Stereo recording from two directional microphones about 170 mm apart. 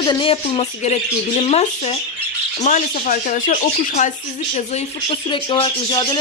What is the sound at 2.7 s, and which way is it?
Speech, 45° left (ahead or behind).